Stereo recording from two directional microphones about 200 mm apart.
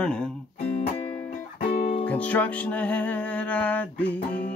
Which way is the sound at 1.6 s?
50° left (ahead or behind).